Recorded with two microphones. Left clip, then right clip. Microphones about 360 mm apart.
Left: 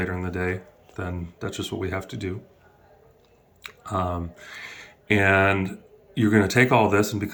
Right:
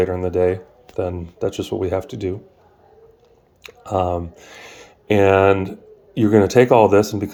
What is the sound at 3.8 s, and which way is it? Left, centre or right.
Speech, right.